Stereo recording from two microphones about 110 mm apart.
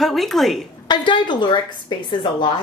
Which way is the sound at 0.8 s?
45° left (ahead or behind).